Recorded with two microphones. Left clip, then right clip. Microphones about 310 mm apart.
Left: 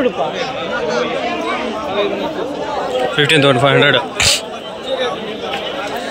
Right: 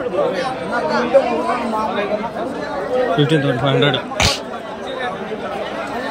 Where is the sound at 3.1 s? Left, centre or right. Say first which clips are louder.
Left 5 dB; centre.